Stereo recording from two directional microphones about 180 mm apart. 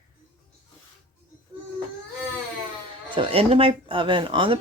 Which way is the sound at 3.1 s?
30° right (ahead or behind).